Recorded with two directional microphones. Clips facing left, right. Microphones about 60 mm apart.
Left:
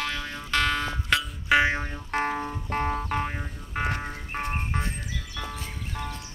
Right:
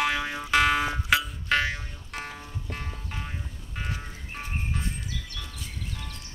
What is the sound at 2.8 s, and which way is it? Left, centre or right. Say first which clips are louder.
Music: left 11 dB; left.